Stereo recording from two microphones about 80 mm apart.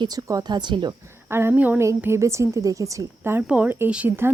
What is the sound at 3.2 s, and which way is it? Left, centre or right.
Speech, right.